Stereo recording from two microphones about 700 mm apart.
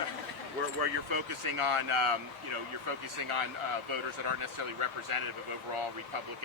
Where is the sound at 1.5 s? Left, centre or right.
Right.